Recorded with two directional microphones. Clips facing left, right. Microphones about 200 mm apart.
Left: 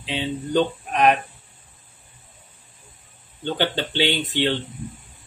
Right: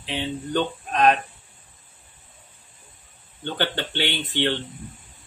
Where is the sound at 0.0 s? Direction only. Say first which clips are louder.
Left 2 dB; 15° left (ahead or behind).